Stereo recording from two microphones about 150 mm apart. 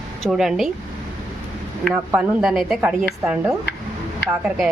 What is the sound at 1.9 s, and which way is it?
A woman's voice, 10° right (ahead or behind).